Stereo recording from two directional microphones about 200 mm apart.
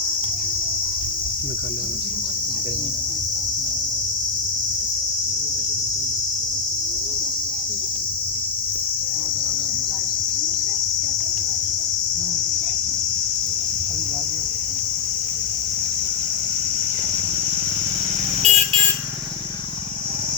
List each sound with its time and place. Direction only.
18.4 s vehicle: 25° right (ahead or behind)